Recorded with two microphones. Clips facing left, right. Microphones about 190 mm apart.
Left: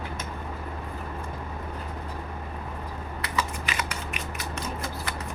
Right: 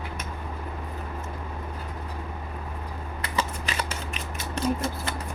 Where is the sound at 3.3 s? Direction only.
35° right (ahead or behind).